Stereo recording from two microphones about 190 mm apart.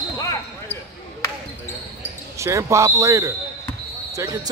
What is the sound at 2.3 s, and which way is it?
Speech, 15° right (ahead or behind).